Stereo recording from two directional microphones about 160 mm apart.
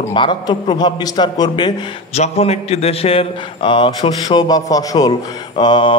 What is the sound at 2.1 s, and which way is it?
A man's voice, 40° left (ahead or behind).